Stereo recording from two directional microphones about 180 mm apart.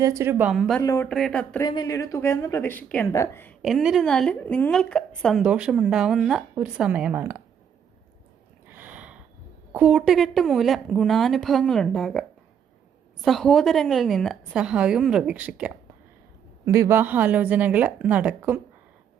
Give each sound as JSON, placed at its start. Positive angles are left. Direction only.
{"t": 0.0, "sound": "a woman's voice", "side_deg": -15}
{"t": 0.5, "sound": "a woman's voice", "side_deg": 0}
{"t": 0.8, "sound": "a woman's voice", "side_deg": 15}
{"t": 1.0, "sound": "a woman's voice", "side_deg": 5}
{"t": 1.6, "sound": "a woman's voice", "side_deg": 25}
{"t": 3.6, "sound": "a woman's voice", "side_deg": 0}
{"t": 8.7, "sound": "a sound", "side_deg": -10}
{"t": 9.7, "sound": "a woman's voice", "side_deg": -5}
{"t": 13.2, "sound": "a woman's voice", "side_deg": 0}